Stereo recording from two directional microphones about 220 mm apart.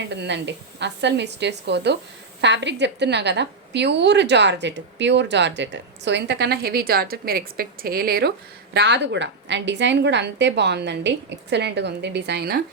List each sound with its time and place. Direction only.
0.1 s a woman's voice: 50° right (ahead or behind)